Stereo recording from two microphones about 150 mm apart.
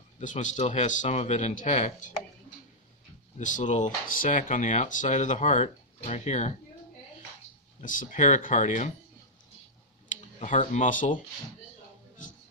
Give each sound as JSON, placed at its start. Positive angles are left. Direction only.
{"t": 0.2, "sound": "speech", "side_deg": 55}
{"t": 3.3, "sound": "speech", "side_deg": 55}
{"t": 7.8, "sound": "speech", "side_deg": 60}
{"t": 10.1, "sound": "speech", "side_deg": 55}